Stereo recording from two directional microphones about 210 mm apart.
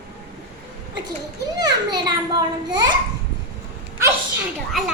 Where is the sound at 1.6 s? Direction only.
20° right (ahead or behind).